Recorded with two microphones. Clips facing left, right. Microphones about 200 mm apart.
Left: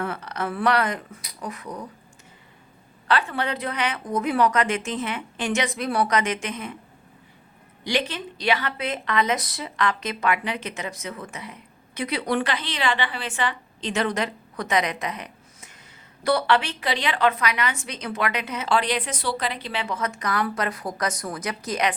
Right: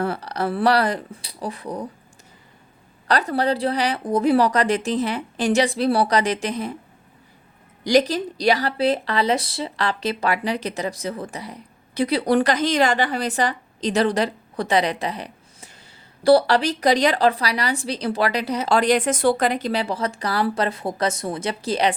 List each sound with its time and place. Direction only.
0.0 s speech: 35° right (ahead or behind)
3.1 s speech: 40° right (ahead or behind)
7.9 s speech: 40° right (ahead or behind)